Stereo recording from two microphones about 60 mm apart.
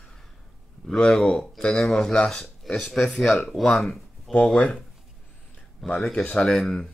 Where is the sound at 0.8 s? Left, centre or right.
Centre.